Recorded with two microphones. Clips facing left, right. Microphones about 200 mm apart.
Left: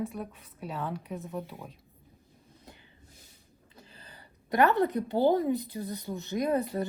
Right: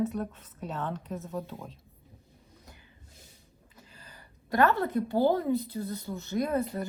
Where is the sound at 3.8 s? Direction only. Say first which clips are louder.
Left 1 dB; 20° left (ahead or behind).